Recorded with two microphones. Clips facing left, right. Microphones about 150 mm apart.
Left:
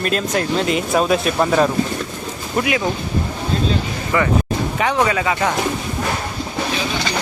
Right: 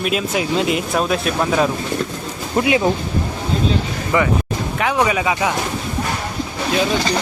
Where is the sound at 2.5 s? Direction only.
25° right (ahead or behind).